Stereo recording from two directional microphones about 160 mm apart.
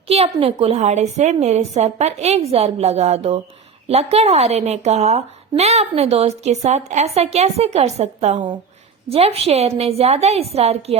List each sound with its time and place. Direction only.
0.1 s a woman's voice: 40° right (ahead or behind)